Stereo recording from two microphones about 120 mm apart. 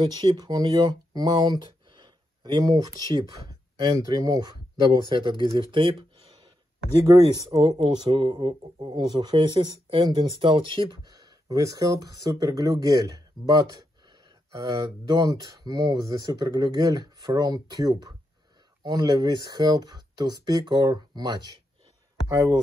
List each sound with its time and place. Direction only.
0.2 s speech: 30° right (ahead or behind); by 6.3 s 50° right (ahead or behind)
7.1 s speech: 35° right (ahead or behind)
7.8 s speech: 45° right (ahead or behind); by 22.6 s 25° right (ahead or behind)